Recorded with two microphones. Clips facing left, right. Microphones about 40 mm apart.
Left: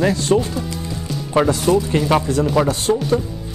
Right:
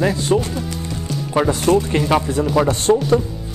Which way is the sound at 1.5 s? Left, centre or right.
Right.